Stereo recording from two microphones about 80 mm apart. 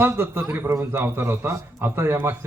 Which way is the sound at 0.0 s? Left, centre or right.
Right.